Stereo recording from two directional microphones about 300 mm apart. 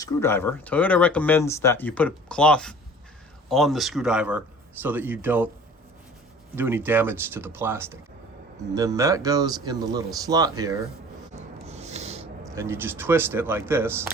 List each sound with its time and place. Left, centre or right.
0.0 s speech: centre
6.6 s speech: centre
11.3 s a sound: right
12.5 s speech: centre